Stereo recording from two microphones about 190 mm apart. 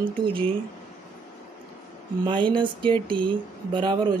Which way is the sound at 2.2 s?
25° right (ahead or behind).